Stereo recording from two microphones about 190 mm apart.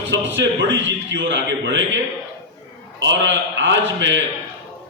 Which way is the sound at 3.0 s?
70° right (ahead or behind).